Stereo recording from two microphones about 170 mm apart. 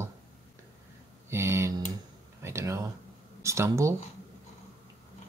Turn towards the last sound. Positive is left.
turn(degrees=-15)  # may be behind; listen again after turning